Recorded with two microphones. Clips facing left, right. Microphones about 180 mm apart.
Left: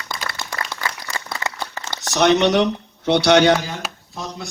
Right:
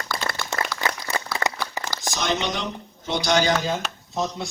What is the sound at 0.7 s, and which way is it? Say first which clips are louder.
Applause: right 1 dB; 25° left (ahead or behind).